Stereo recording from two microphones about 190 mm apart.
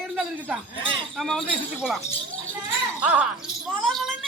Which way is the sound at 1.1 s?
Centre (ahead or behind).